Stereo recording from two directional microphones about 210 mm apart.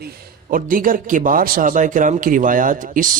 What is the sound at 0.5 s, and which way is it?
A man's voice, 40° right (ahead or behind).